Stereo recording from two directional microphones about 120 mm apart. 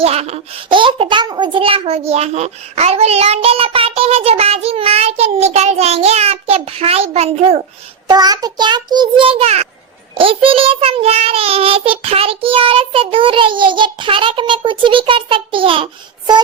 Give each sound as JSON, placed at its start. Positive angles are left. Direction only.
{"t": 0.0, "sound": "speech", "side_deg": -60}
{"t": 0.7, "sound": "a child's voice", "side_deg": -45}
{"t": 8.0, "sound": "a child's voice", "side_deg": -35}
{"t": 10.2, "sound": "child singing", "side_deg": -50}